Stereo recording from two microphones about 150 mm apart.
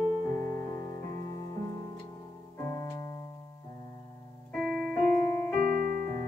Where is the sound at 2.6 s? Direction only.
20° left (ahead or behind).